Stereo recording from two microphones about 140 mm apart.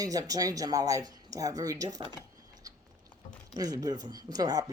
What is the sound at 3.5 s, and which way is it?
Speech, 25° right (ahead or behind).